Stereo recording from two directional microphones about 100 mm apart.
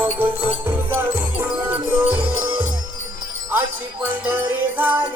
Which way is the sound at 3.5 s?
20° right (ahead or behind).